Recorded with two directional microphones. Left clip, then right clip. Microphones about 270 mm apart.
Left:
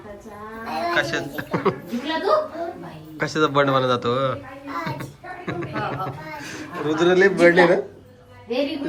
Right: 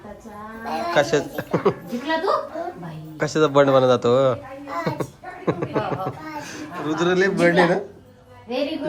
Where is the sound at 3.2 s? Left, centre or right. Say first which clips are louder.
Right 2 dB; centre.